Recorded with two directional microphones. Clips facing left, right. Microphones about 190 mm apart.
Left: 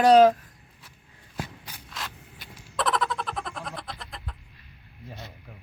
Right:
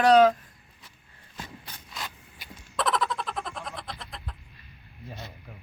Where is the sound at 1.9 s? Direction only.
Centre (ahead or behind).